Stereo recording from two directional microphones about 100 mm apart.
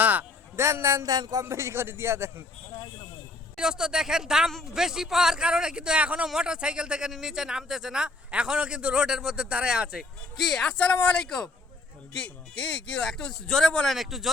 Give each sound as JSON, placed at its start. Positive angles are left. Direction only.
{"t": 0.0, "sound": "a sound", "side_deg": -15}
{"t": 0.6, "sound": "a man's voice", "side_deg": -30}
{"t": 1.0, "sound": "speech", "side_deg": -40}
{"t": 1.5, "sound": "a man's voice", "side_deg": -25}
{"t": 3.6, "sound": "speech", "side_deg": -5}